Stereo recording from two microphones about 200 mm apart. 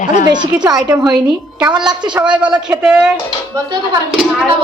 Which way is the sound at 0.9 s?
20° right (ahead or behind).